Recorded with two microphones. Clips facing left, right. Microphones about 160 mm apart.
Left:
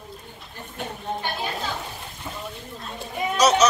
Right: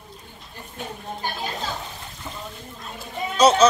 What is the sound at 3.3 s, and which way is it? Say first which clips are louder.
Speech: right 3 dB; 30° right (ahead or behind).